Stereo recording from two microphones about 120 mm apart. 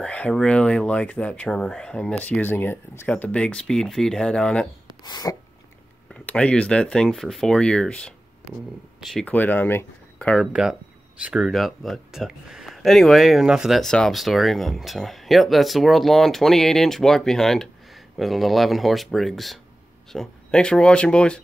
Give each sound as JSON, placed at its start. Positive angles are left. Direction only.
{"t": 0.0, "sound": "speech", "side_deg": 10}
{"t": 5.0, "sound": "sneeze", "side_deg": 30}
{"t": 6.2, "sound": "speech", "side_deg": 10}
{"t": 9.2, "sound": "speech", "side_deg": 15}
{"t": 10.4, "sound": "speech", "side_deg": -5}